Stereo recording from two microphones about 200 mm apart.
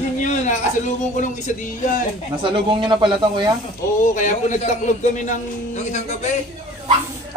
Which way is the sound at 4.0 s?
40° left (ahead or behind).